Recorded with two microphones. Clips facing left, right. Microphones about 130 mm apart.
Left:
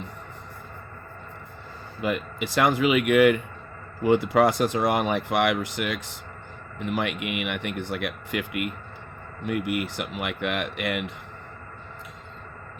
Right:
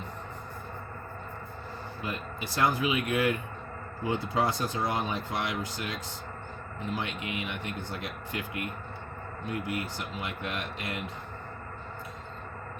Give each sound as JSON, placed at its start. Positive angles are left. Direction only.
{"t": 2.0, "sound": "speech", "side_deg": 80}
{"t": 6.7, "sound": "a man's voice", "side_deg": 75}